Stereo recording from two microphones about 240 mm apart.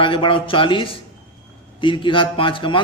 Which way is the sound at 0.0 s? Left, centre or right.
Left.